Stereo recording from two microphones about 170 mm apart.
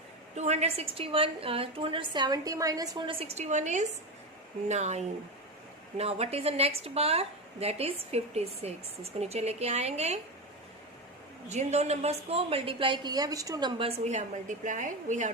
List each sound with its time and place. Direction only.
0.3 s a woman's voice: 40° right (ahead or behind); by 3.2 s 20° right (ahead or behind)
3.2 s a woman's voice: 40° right (ahead or behind)
11.4 s a woman's voice: 40° right (ahead or behind)